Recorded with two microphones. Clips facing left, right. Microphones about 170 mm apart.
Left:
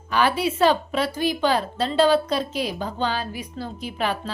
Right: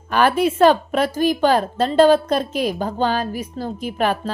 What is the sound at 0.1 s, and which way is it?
A woman's voice, 50° right (ahead or behind).